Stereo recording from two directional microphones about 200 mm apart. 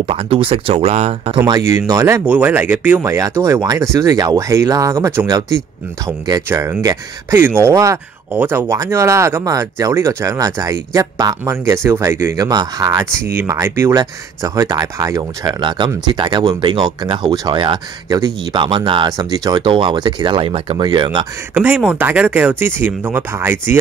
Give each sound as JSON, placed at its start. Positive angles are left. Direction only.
{"t": 0.0, "sound": "speech", "side_deg": -30}
{"t": 1.9, "sound": "speech", "side_deg": -15}
{"t": 21.5, "sound": "speech", "side_deg": -5}